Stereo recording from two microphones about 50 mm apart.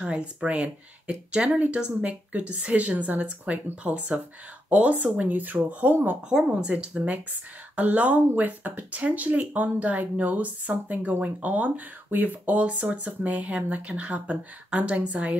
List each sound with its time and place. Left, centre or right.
0.0 s speech: right
5.9 s speech: right
6.4 s speech: right